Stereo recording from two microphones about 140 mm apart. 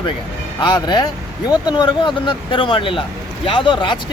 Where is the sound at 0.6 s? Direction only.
30° left (ahead or behind).